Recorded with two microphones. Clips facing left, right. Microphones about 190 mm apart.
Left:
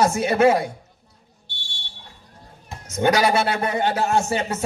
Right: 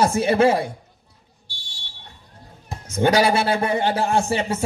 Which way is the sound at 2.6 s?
30° right (ahead or behind).